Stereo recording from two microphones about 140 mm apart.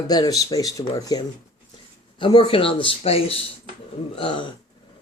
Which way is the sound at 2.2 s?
40° left (ahead or behind).